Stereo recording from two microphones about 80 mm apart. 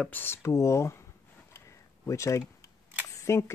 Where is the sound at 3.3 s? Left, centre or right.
Left.